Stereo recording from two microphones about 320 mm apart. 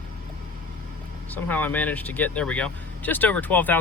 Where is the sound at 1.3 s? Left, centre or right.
Centre.